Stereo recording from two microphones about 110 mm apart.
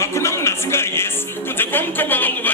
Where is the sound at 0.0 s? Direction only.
25° left (ahead or behind).